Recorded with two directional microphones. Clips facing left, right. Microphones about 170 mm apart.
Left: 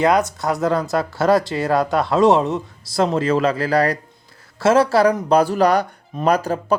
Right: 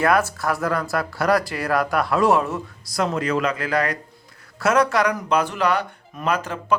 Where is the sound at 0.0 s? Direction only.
20° left (ahead or behind).